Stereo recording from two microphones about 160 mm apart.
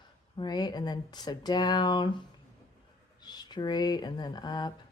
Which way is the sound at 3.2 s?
25° left (ahead or behind).